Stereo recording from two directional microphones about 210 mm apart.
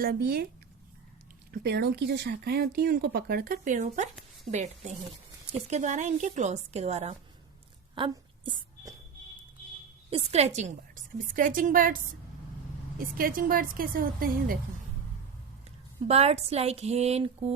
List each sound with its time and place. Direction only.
0.0 s speech: 45° right (ahead or behind)
1.5 s a woman's voice: 50° right (ahead or behind); by 7.2 s 30° right (ahead or behind)
7.9 s a sound: 25° right (ahead or behind)
10.1 s a woman's voice: 30° right (ahead or behind)
13.0 s speech: 40° right (ahead or behind)
16.0 s a woman's voice: 30° right (ahead or behind)